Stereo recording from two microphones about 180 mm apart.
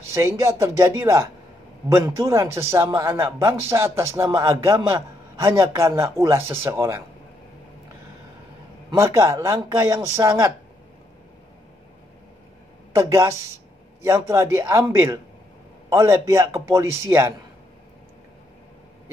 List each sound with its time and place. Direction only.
0.1 s speech: 15° right (ahead or behind)
8.9 s speech: 15° right (ahead or behind)
12.9 s speech: 15° right (ahead or behind)